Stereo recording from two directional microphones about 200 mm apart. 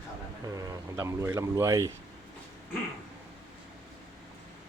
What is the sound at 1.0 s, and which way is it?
Speech, 15° right (ahead or behind).